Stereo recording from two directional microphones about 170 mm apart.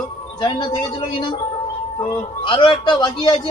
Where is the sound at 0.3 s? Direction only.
25° left (ahead or behind).